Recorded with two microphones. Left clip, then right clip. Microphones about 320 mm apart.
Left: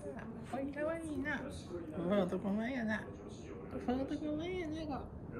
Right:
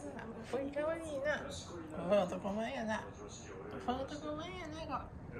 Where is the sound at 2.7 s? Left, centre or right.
Right.